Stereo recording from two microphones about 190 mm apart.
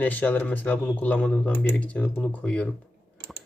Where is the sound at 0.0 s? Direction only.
10° left (ahead or behind).